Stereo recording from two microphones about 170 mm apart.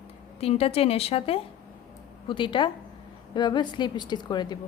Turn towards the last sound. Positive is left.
turn(degrees=25)  # may be behind; listen again after turning